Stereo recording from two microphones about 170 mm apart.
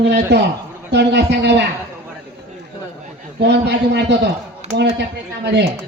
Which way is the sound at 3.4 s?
90° right.